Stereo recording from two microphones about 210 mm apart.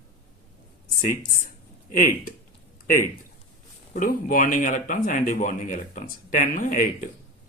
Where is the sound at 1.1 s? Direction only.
40° left (ahead or behind).